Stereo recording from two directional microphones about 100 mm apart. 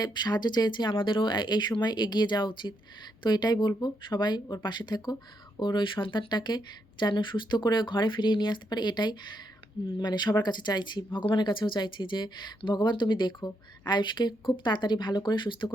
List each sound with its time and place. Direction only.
0.0 s speech: 45° left (ahead or behind)